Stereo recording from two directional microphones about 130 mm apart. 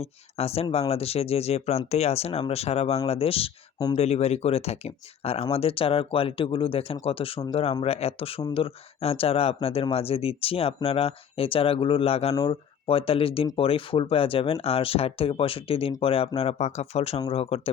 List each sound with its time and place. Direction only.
0.0 s speech: 50° left (ahead or behind)